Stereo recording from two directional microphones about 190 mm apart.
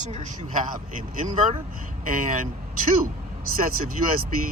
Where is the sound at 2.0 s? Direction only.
45° right (ahead or behind).